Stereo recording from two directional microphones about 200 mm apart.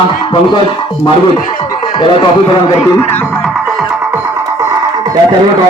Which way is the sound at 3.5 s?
5° right (ahead or behind).